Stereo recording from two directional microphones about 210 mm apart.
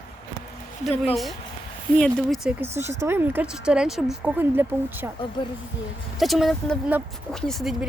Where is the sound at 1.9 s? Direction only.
5° left (ahead or behind).